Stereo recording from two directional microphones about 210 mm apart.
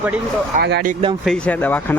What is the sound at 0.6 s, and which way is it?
Speech, 50° right (ahead or behind).